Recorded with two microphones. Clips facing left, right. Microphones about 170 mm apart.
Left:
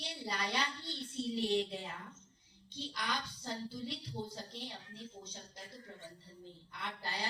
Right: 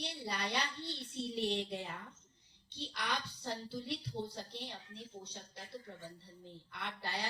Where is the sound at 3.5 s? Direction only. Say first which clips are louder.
Right 1 dB; 60° right (ahead or behind).